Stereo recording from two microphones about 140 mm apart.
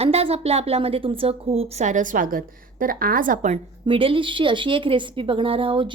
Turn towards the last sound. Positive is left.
turn(degrees=-40)  # may be behind; listen again after turning